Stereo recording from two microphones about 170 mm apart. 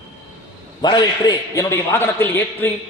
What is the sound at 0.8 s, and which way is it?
A man's voice, 25° left (ahead or behind).